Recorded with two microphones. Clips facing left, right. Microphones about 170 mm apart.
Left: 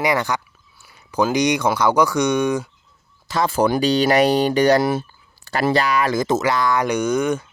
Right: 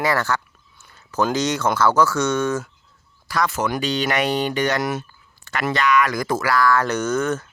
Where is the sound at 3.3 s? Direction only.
30° left (ahead or behind).